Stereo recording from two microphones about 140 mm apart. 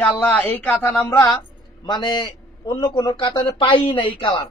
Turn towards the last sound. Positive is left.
turn(degrees=35)  # may be behind; listen again after turning